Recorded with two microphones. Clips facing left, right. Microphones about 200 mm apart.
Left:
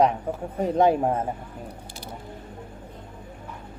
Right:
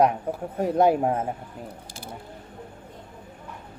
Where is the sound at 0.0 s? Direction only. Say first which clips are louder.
Even; 5° right (ahead or behind).